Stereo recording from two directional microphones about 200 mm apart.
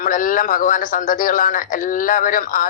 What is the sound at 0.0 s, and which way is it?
A man's voice, 40° left (ahead or behind).